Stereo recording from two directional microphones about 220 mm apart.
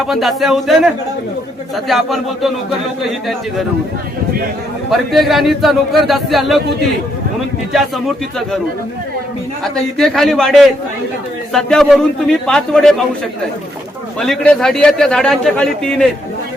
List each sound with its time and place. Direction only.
0.0 s a man's voice: centre (ahead or behind)
4.9 s a man's voice: centre (ahead or behind)
7.7 s a man's voice: centre (ahead or behind)
10.0 s a man's voice: centre (ahead or behind)
14.2 s a man's voice: 5° left (ahead or behind)